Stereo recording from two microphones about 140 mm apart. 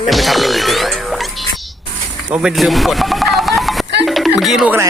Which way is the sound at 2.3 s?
5° right (ahead or behind).